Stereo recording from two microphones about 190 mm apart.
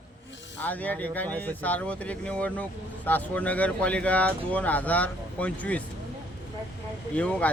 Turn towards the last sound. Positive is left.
turn(degrees=5)  # may be behind; listen again after turning